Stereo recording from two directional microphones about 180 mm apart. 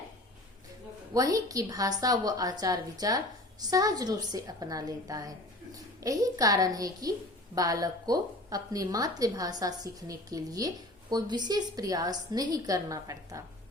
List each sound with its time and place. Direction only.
1.1 s a woman's voice: 20° right (ahead or behind)